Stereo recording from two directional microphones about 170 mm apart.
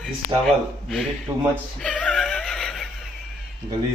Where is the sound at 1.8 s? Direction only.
5° left (ahead or behind).